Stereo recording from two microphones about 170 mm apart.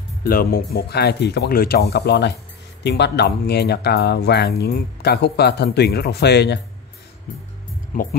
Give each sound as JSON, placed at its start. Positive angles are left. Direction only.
{"t": 0.2, "sound": "speech", "side_deg": 60}
{"t": 7.9, "sound": "speech", "side_deg": 55}